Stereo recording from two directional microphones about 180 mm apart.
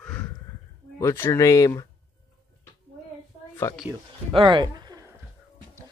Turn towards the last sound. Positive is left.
turn(degrees=-25)  # may be behind; listen again after turning